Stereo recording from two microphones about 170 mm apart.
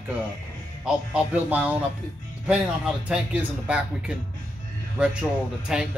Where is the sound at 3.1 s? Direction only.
5° right (ahead or behind).